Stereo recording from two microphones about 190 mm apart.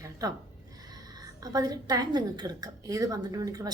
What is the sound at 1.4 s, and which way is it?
A woman's voice, 20° right (ahead or behind).